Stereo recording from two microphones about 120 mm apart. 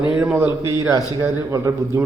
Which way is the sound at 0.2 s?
15° right (ahead or behind).